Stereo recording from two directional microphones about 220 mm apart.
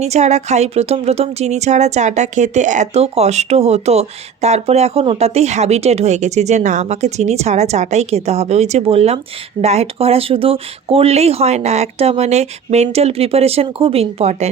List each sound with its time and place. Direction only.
0.0 s speech: 30° right (ahead or behind)